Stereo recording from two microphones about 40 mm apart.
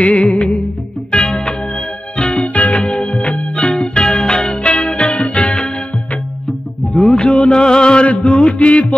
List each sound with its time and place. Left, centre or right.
0.0 s music: left
1.1 s music: left
6.9 s music: left